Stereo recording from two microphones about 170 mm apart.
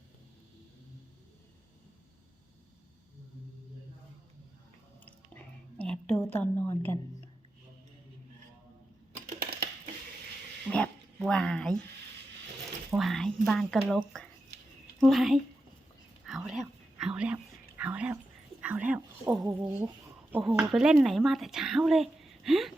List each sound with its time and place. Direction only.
5.0 s a sound: 10° left (ahead or behind)
9.4 s a sound: 65° right (ahead or behind)
10.7 s dog: 5° left (ahead or behind)
13.0 s speech: centre (ahead or behind)
16.2 s whispering: centre (ahead or behind)
18.6 s a woman's voice: 10° right (ahead or behind)